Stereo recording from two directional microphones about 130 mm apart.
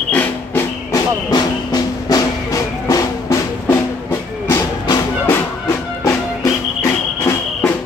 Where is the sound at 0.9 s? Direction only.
30° left (ahead or behind).